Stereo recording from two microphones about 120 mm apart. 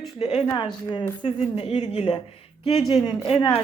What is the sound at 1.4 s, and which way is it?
Speech, 60° left (ahead or behind).